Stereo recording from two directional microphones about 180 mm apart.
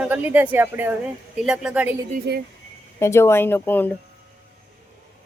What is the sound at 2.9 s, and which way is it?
Speech, 15° left (ahead or behind).